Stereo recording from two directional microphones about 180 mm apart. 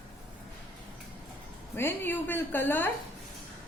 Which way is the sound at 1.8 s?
10° left (ahead or behind).